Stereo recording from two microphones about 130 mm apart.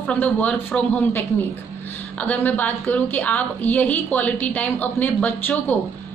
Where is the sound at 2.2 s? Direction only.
10° left (ahead or behind).